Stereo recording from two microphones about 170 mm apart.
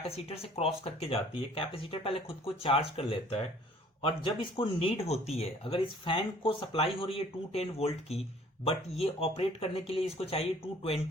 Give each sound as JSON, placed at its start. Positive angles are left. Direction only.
{"t": 0.1, "sound": "speech", "side_deg": 35}